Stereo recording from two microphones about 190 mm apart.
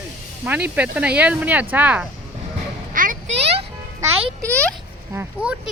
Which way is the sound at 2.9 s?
45° right (ahead or behind).